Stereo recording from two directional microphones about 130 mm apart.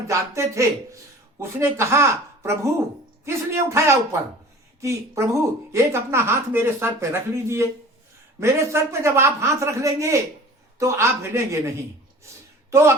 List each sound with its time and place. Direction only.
0.1 s speech: 25° right (ahead or behind)